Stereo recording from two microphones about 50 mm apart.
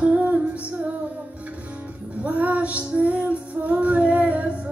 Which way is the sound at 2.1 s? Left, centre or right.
Right.